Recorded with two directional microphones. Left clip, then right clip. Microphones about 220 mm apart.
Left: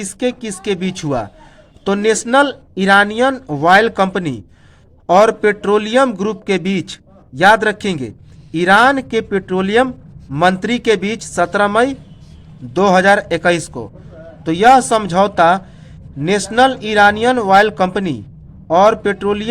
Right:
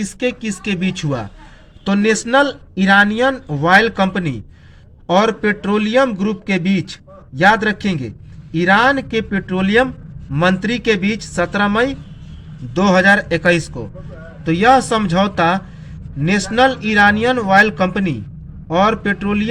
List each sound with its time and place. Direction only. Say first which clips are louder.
0.0 s a man's voice: left 1 dB; 30° left (ahead or behind)